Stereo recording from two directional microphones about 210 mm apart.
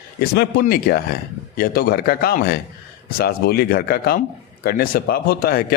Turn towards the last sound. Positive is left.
turn(degrees=45)  # may be behind; listen again after turning